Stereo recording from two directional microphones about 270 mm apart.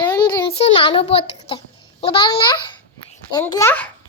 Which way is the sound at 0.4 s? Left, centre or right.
Centre.